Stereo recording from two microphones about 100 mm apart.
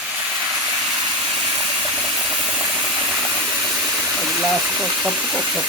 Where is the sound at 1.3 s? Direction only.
5° right (ahead or behind).